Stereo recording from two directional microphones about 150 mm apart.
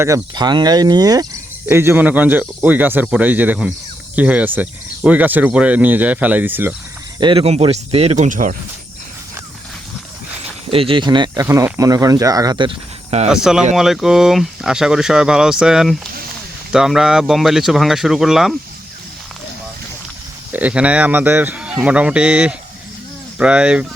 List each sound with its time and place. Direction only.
0.0 s speech: 25° right (ahead or behind)
7.2 s speech: 35° right (ahead or behind); by 8.5 s 55° right (ahead or behind)
10.7 s speech: 40° right (ahead or behind)
11.4 s speech: 20° right (ahead or behind)
13.2 s speech: 5° right (ahead or behind)
20.5 s speech: 10° right (ahead or behind)